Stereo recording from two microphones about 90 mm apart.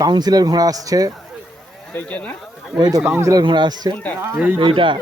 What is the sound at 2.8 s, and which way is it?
Speech, 45° right (ahead or behind).